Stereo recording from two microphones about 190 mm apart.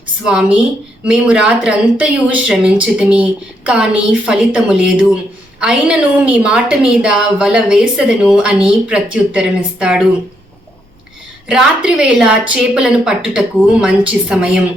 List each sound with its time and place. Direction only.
0.3 s speech: 5° right (ahead or behind)
11.4 s speech: 5° right (ahead or behind)